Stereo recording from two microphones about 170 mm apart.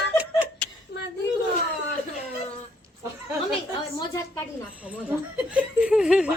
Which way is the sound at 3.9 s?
15° left (ahead or behind).